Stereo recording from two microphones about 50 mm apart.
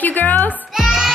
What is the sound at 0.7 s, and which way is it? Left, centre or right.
Music, centre.